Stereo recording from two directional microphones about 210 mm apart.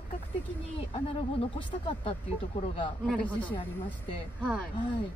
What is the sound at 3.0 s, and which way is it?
Speech, 5° left (ahead or behind).